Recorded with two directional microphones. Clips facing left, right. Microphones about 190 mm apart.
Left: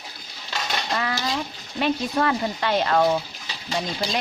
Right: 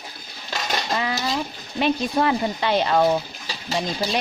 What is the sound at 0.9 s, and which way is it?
Speech, 20° right (ahead or behind).